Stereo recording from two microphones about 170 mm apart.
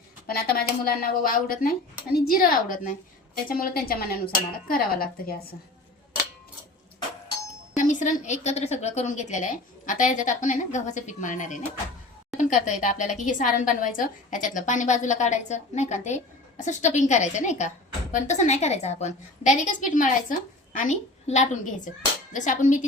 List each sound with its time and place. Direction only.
0.3 s speech: 60° left (ahead or behind)
7.8 s a woman's voice: 45° left (ahead or behind)